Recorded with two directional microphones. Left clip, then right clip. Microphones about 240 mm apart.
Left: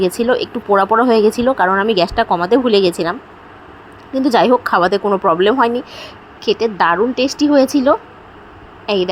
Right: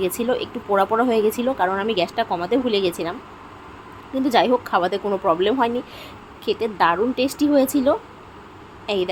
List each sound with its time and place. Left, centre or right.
0.2 s a woman's voice: centre
4.1 s a woman's voice: centre